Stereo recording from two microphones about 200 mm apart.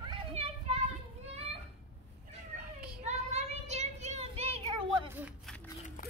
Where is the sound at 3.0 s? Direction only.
35° right (ahead or behind).